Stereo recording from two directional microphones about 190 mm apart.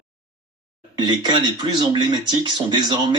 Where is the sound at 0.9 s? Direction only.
25° right (ahead or behind).